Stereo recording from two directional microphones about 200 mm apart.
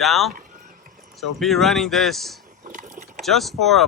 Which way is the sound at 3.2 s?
Centre (ahead or behind).